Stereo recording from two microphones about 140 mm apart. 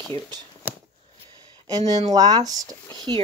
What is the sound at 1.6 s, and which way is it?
Speech, 30° right (ahead or behind).